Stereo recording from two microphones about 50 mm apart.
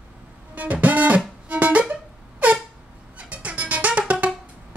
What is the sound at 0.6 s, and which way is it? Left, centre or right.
Music, right.